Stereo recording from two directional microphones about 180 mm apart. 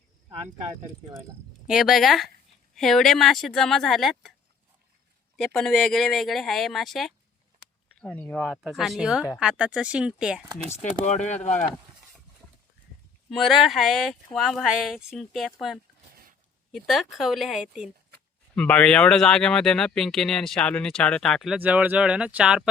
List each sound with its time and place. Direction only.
1.6 s speech: 5° right (ahead or behind)
5.4 s speech: centre (ahead or behind)
11.0 s speech: 40° left (ahead or behind)
13.3 s speech: centre (ahead or behind)